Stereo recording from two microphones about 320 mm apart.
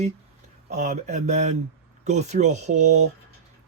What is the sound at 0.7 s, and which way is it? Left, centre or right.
A man's voice, right.